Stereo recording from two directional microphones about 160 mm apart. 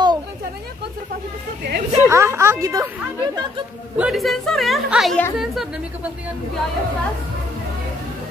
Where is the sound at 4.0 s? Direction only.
Centre (ahead or behind).